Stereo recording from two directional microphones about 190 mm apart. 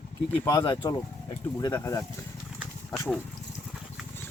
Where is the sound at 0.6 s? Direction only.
25° left (ahead or behind); by 3.2 s 10° left (ahead or behind).